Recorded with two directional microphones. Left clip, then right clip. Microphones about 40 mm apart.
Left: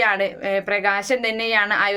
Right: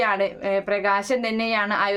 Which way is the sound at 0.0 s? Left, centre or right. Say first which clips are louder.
Left 2 dB; right.